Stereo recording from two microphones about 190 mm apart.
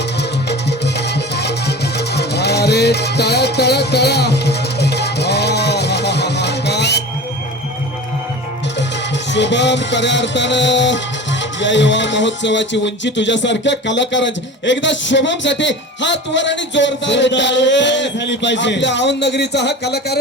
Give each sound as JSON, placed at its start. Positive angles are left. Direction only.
{"t": 0.9, "sound": "music", "side_deg": 60}
{"t": 9.3, "sound": "music", "side_deg": 65}
{"t": 11.6, "sound": "speech", "side_deg": 70}